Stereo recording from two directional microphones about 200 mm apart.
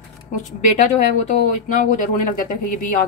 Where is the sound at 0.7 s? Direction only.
40° left (ahead or behind).